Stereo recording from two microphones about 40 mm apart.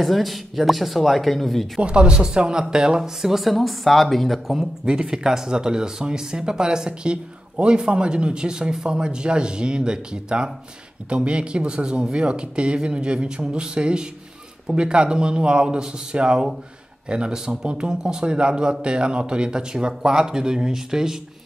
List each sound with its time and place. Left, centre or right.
0.0 s speech: centre
1.8 s speech: right; by 4.6 s centre
5.0 s speech: centre